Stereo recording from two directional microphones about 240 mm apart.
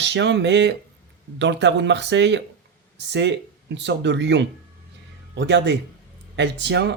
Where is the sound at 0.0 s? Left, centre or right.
Right.